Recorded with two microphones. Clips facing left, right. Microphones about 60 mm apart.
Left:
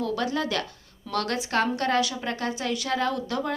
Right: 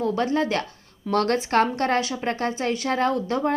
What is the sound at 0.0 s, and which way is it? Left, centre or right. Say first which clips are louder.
A woman's voice: right 4 dB; right.